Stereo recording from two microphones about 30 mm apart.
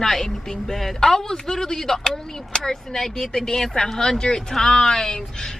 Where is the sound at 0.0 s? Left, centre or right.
Centre.